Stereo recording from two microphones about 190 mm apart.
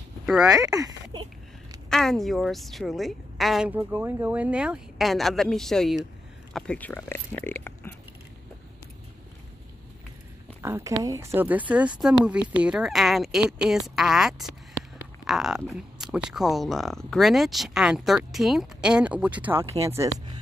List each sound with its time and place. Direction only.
0.5 s speech: 20° right (ahead or behind)
1.9 s speech: 5° left (ahead or behind)
10.6 s a woman's voice: 15° right (ahead or behind)